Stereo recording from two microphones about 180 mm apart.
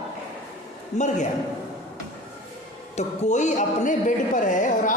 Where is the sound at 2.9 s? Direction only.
40° left (ahead or behind).